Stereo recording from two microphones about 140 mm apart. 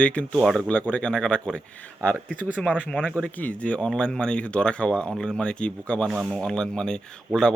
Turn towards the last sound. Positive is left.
turn(degrees=5)  # may be behind; listen again after turning